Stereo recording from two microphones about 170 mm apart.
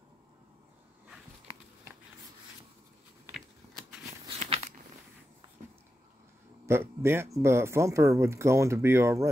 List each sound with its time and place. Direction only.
3.3 s scissors: centre (ahead or behind)
6.6 s speech: 15° right (ahead or behind)